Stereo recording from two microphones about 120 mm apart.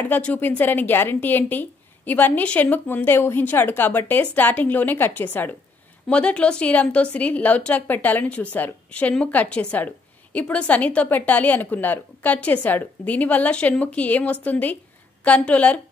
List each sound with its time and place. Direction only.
0.0 s speech: 15° left (ahead or behind)